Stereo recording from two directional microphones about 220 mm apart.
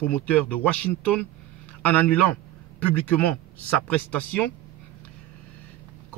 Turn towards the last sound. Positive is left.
turn(degrees=5)  # may be behind; listen again after turning